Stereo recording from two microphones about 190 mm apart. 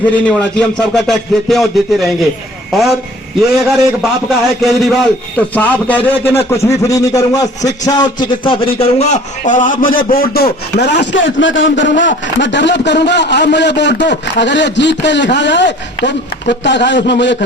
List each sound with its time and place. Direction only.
0.3 s speech: 5° left (ahead or behind)
3.5 s a man's voice: centre (ahead or behind); by 17.3 s 70° left (ahead or behind)